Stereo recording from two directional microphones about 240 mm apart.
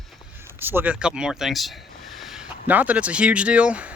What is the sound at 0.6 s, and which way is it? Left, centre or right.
Speech, centre.